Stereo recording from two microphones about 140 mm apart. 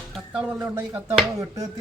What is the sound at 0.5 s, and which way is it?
Speech, 20° right (ahead or behind).